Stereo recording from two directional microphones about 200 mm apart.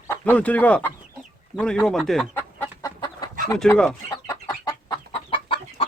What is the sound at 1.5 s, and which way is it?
Chicken, 5° left (ahead or behind).